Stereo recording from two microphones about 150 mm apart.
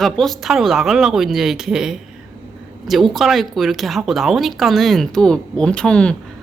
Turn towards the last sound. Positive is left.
turn(degrees=5)  # may be behind; listen again after turning